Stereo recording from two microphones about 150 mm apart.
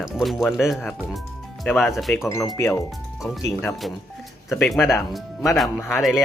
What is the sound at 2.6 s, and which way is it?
Speech, 20° left (ahead or behind).